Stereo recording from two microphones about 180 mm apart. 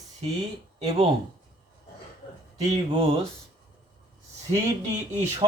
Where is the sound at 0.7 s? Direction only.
35° right (ahead or behind).